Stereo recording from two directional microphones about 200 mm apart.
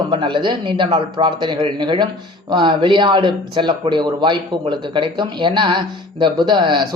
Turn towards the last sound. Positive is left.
turn(degrees=-20)  # may be behind; listen again after turning